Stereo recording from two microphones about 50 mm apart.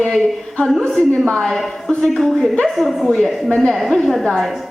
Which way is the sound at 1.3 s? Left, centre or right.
Centre.